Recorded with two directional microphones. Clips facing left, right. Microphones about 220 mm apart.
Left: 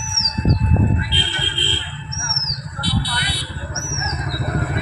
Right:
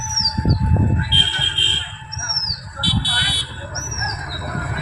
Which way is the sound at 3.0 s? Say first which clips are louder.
Left 2 dB; 30° right (ahead or behind).